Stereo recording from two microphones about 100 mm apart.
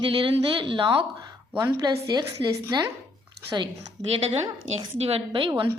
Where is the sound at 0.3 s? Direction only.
60° right (ahead or behind).